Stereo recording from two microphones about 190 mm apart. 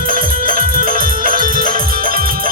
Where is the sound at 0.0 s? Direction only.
50° right (ahead or behind).